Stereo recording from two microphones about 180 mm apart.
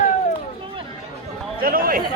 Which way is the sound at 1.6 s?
55° right (ahead or behind).